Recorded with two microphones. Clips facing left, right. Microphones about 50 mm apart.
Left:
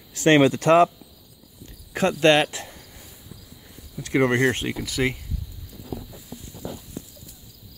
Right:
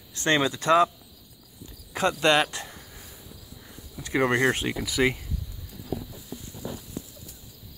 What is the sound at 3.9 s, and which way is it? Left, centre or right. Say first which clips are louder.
Speech: left 3 dB; centre.